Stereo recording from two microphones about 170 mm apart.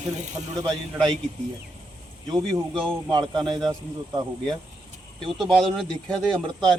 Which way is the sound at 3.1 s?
25° right (ahead or behind).